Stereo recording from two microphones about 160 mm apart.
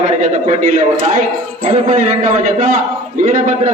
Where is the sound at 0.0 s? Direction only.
45° right (ahead or behind).